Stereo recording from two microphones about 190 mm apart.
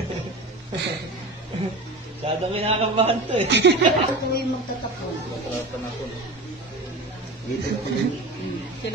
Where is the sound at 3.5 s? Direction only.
70° right (ahead or behind).